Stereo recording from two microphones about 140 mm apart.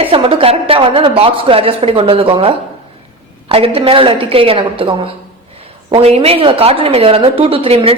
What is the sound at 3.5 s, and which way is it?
A woman's voice, 40° right (ahead or behind).